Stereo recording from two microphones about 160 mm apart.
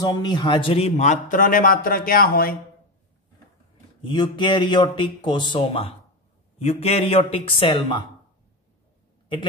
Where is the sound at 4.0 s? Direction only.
30° left (ahead or behind).